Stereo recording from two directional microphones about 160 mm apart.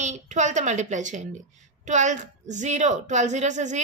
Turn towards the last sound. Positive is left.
turn(degrees=-50)  # may be behind; listen again after turning